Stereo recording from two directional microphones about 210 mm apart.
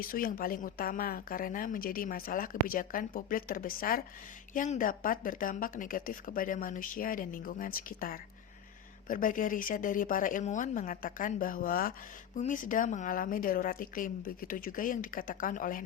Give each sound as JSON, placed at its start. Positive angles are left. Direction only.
{"t": 0.0, "sound": "speech", "side_deg": 45}